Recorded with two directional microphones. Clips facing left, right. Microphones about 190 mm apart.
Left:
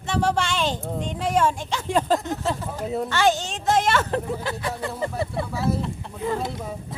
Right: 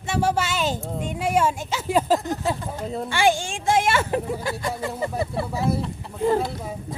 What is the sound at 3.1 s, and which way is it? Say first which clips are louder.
Speech: right 2 dB; 10° right (ahead or behind).